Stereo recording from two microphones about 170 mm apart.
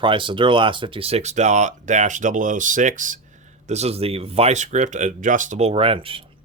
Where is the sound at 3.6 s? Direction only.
40° right (ahead or behind).